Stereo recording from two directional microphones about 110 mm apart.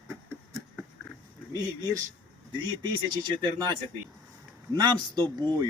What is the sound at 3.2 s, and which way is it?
A man's voice, 40° right (ahead or behind).